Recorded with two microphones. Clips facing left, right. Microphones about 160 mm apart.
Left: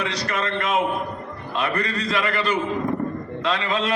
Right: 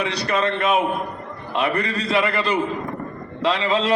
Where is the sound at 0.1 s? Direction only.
30° right (ahead or behind).